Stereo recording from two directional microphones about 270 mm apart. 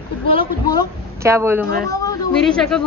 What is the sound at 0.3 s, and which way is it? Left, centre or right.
Speech, centre.